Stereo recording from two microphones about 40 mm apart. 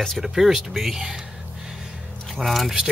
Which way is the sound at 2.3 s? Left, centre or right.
Centre.